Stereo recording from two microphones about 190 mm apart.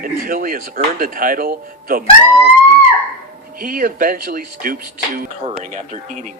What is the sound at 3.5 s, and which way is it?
Speech, 50° right (ahead or behind).